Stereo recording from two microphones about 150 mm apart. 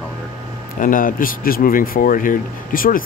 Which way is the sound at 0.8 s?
65° left (ahead or behind).